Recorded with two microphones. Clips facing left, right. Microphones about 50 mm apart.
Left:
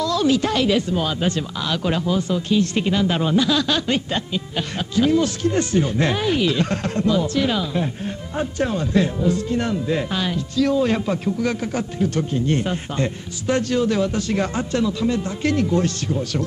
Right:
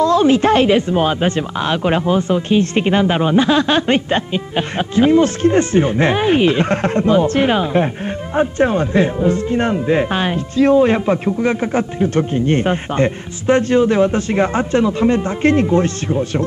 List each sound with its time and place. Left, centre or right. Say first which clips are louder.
0.0 s speech: right 7 dB; right